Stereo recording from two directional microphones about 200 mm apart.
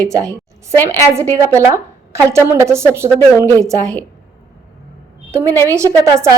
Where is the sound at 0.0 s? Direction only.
15° right (ahead or behind).